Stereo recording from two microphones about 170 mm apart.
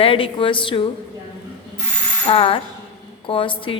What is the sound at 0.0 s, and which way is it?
Speech, 30° left (ahead or behind).